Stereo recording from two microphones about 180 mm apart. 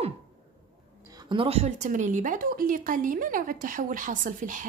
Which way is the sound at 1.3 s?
30° right (ahead or behind).